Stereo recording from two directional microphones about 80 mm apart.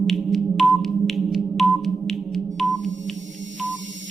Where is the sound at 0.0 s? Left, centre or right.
Centre.